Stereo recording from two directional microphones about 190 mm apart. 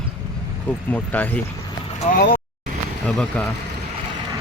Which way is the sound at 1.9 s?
45° left (ahead or behind).